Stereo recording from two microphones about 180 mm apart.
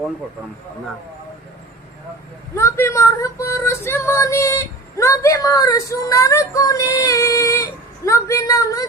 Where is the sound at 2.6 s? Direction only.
15° left (ahead or behind).